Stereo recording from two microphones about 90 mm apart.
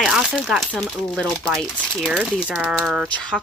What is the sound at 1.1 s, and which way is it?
Speech, 10° left (ahead or behind).